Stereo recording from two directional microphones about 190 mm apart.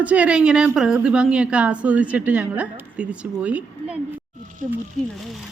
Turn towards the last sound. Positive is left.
turn(degrees=0)  # may be behind; listen again after turning